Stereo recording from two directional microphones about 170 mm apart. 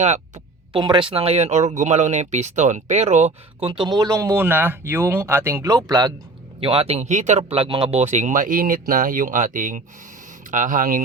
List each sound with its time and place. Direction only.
0.7 s speech: 30° right (ahead or behind)
3.7 s speech: 25° right (ahead or behind)
6.6 s speech: 35° right (ahead or behind); by 11.0 s 55° right (ahead or behind)